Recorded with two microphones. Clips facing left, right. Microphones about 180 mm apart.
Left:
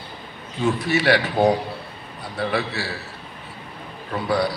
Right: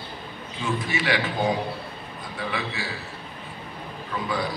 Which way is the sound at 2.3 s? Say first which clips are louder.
Left 6 dB; 70° left (ahead or behind).